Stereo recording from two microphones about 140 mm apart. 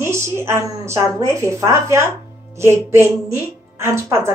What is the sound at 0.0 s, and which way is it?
A woman's voice, 20° right (ahead or behind).